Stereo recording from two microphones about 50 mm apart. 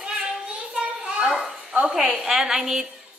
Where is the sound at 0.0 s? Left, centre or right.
Right.